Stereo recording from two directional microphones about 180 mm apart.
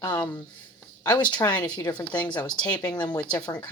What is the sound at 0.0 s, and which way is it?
Speech, 20° left (ahead or behind).